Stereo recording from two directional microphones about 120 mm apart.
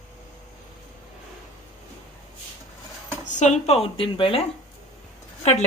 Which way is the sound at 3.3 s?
75° left (ahead or behind).